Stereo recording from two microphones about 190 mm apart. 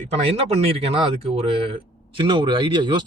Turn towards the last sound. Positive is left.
turn(degrees=-25)  # may be behind; listen again after turning